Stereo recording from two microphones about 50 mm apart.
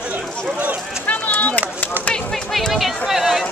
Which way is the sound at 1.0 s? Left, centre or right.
Left.